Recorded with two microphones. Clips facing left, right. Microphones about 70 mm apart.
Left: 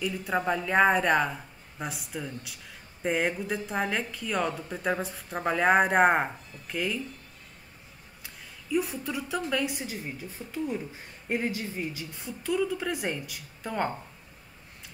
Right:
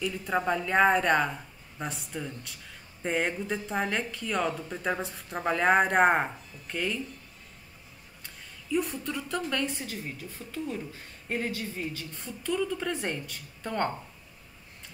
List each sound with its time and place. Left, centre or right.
0.0 s speech: centre
8.2 s a woman's voice: centre